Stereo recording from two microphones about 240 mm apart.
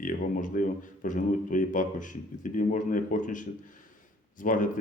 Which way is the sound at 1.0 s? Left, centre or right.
Left.